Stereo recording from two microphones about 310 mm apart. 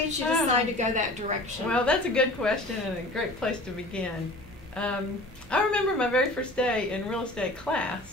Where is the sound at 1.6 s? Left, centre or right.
Centre.